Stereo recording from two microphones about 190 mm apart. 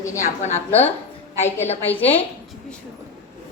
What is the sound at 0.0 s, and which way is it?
Speech, 15° left (ahead or behind).